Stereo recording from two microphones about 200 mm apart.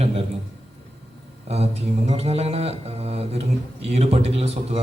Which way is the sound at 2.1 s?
30° right (ahead or behind).